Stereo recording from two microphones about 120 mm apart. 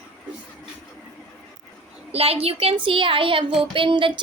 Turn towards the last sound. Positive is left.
turn(degrees=-45)  # may be behind; listen again after turning